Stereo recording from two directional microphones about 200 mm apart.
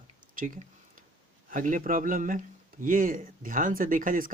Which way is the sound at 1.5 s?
40° right (ahead or behind).